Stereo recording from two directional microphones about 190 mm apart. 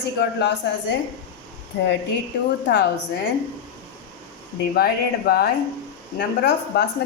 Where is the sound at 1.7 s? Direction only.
60° left (ahead or behind).